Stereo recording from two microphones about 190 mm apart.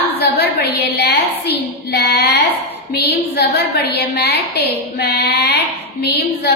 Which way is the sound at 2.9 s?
60° left (ahead or behind).